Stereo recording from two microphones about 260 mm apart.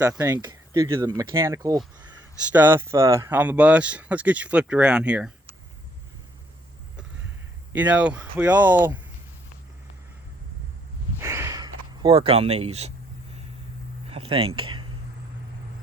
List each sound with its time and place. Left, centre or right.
0.1 s speech: centre
7.7 s speech: centre
11.2 s a sound: centre
14.1 s speech: right